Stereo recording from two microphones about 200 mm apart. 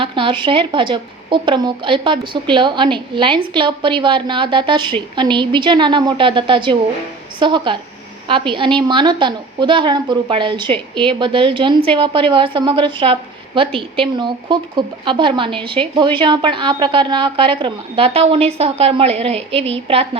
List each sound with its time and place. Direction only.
0.0 s speech: 25° right (ahead or behind)